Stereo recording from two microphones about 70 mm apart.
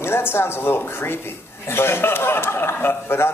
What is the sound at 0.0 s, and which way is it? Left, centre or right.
A man's voice, left.